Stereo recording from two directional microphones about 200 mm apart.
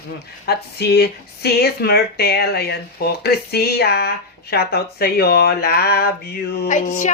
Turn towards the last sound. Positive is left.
turn(degrees=40)  # may be behind; listen again after turning